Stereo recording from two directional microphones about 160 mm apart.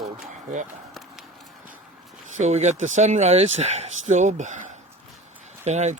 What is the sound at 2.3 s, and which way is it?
Speech, 45° right (ahead or behind).